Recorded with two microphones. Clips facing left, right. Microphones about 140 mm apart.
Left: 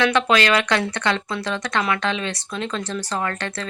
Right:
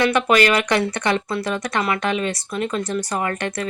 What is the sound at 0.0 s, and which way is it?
Speech, 10° right (ahead or behind).